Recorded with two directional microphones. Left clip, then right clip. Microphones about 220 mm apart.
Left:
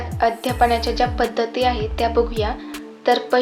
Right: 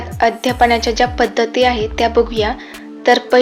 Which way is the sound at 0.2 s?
30° right (ahead or behind).